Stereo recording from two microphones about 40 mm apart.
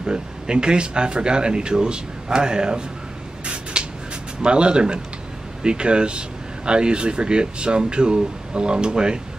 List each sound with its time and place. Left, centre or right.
0.0 s speech: right
3.8 s a sound: right
4.4 s speech: right